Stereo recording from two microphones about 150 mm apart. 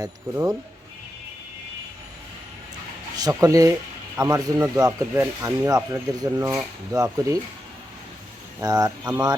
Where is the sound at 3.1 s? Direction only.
25° right (ahead or behind).